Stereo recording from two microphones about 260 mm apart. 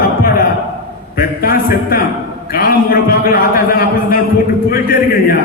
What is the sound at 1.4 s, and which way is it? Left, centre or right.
A man's voice, left.